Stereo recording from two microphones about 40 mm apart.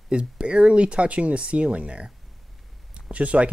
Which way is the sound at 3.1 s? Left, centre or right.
Right.